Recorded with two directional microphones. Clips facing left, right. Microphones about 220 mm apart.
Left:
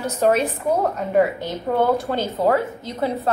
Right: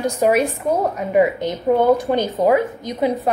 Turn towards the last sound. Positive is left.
turn(degrees=-15)  # may be behind; listen again after turning